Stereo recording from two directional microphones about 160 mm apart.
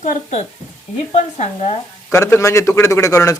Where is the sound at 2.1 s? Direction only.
20° left (ahead or behind).